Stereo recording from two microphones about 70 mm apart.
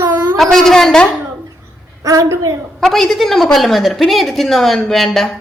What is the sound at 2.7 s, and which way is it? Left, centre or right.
A woman's voice, centre.